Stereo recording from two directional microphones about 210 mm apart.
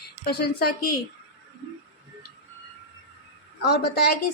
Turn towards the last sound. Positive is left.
turn(degrees=50)  # may be behind; listen again after turning